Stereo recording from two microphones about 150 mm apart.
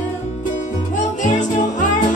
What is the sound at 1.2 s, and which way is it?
Music, 55° left (ahead or behind).